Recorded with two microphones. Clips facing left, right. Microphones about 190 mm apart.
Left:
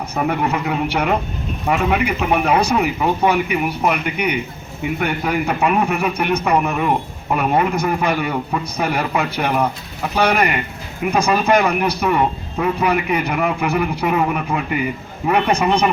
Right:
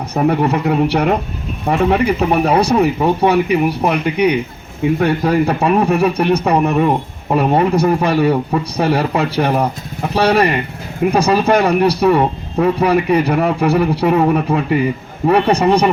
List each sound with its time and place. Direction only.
0.1 s speech: 35° right (ahead or behind)